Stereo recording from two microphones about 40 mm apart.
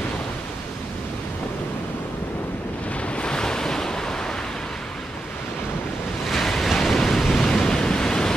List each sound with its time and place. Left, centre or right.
3.2 s waves: centre
6.2 s waves: centre